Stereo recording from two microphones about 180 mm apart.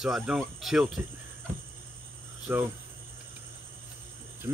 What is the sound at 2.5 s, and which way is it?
Speech, 10° right (ahead or behind).